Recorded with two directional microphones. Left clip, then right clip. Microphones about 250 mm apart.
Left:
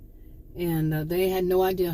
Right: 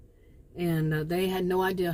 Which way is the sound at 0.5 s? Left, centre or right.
Right.